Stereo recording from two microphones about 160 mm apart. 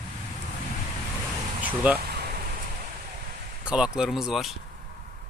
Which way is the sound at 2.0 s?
75° right (ahead or behind).